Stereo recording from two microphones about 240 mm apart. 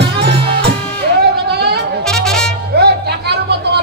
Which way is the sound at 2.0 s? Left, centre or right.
Centre.